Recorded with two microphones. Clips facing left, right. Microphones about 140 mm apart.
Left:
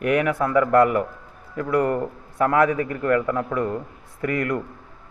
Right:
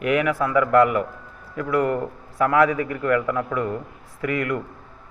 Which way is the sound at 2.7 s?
35° left (ahead or behind).